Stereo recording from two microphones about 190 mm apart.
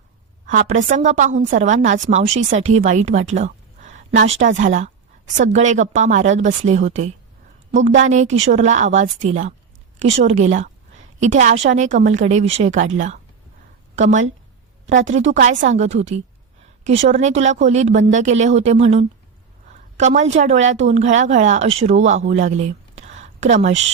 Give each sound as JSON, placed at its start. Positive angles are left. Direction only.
{"t": 0.4, "sound": "a woman's voice", "side_deg": -45}
{"t": 11.5, "sound": "a woman's voice", "side_deg": -80}
{"t": 11.8, "sound": "a woman's voice", "side_deg": -40}